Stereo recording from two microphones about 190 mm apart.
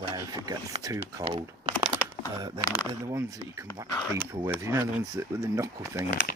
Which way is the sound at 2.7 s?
15° right (ahead or behind).